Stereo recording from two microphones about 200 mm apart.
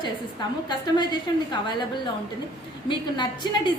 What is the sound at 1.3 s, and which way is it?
Speech, 20° left (ahead or behind).